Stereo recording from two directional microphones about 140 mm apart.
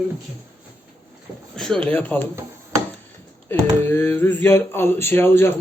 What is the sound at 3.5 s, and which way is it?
Speech, 15° left (ahead or behind).